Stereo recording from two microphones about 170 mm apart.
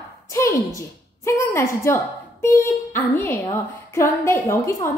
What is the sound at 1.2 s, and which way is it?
A woman's voice, 15° left (ahead or behind).